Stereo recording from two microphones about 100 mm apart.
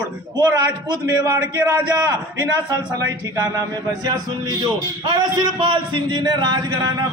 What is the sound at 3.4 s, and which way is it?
A man's voice, 40° right (ahead or behind).